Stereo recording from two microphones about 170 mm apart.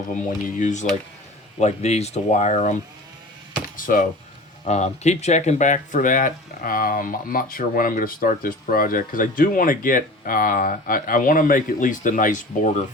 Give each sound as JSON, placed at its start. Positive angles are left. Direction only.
{"t": 0.4, "sound": "speech", "side_deg": 45}
{"t": 3.8, "sound": "speech", "side_deg": 50}
{"t": 4.6, "sound": "speech", "side_deg": 40}